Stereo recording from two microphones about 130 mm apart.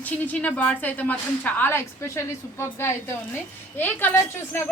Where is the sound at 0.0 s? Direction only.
10° left (ahead or behind).